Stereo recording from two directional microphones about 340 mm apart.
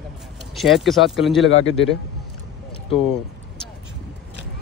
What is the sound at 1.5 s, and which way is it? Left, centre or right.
Speech, left.